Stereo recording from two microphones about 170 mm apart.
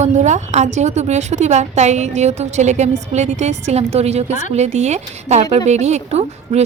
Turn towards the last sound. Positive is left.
turn(degrees=-40)  # may be behind; listen again after turning